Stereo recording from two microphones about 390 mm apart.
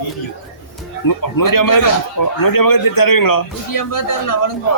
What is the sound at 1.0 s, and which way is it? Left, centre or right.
A man's voice, left.